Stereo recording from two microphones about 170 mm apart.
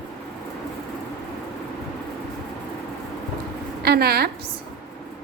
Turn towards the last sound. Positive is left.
turn(degrees=-70)  # may be behind; listen again after turning